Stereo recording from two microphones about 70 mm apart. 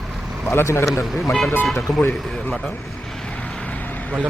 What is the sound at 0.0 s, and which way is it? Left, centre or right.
Vehicle, centre.